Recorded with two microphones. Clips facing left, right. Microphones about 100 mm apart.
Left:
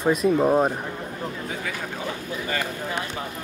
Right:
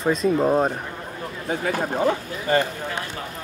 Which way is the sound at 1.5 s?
40° right (ahead or behind).